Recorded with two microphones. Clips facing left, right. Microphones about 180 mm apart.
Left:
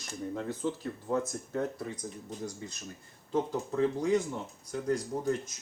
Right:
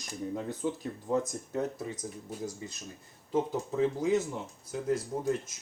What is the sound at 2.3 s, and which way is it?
Speech, 5° right (ahead or behind).